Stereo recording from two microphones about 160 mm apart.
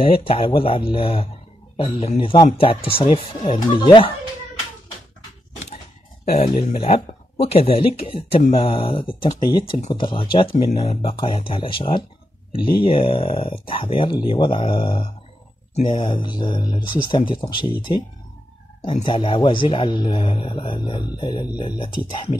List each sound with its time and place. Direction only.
0.2 s a man's voice: 35° left (ahead or behind)
6.3 s a man's voice: 45° left (ahead or behind); by 17.7 s 30° left (ahead or behind)
18.8 s a man's voice: 35° left (ahead or behind)